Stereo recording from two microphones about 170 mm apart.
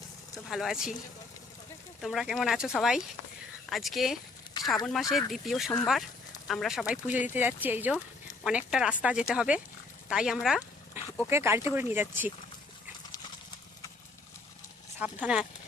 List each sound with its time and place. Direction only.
0.5 s speech: centre (ahead or behind)
2.0 s speech: centre (ahead or behind)
4.6 s a sound: 25° left (ahead or behind)
5.1 s speech: centre (ahead or behind)
11.0 s dog: 15° right (ahead or behind)
11.3 s speech: 15° right (ahead or behind)
14.9 s speech: 10° right (ahead or behind)